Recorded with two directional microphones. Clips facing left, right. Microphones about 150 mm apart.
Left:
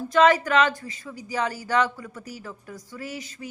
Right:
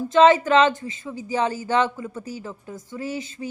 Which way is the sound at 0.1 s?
25° right (ahead or behind).